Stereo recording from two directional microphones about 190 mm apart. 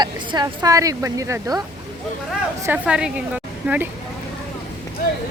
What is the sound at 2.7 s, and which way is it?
A woman's voice, 5° right (ahead or behind).